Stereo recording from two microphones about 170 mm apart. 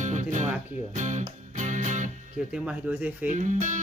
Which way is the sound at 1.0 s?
45° right (ahead or behind).